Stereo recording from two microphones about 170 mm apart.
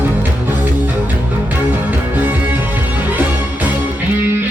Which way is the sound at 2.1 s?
10° right (ahead or behind).